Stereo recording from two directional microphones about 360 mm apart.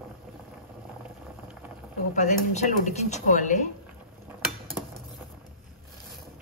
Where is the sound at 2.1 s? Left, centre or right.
Centre.